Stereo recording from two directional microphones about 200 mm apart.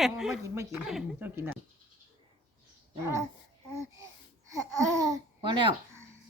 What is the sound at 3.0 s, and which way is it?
Speech, 15° right (ahead or behind).